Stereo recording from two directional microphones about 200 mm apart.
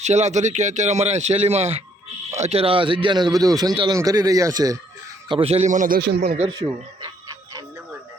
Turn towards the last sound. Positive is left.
turn(degrees=-15)  # may be behind; listen again after turning